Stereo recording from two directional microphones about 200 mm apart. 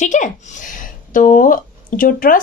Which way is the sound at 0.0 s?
35° left (ahead or behind).